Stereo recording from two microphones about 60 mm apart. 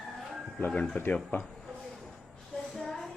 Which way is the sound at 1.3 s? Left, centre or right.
Left.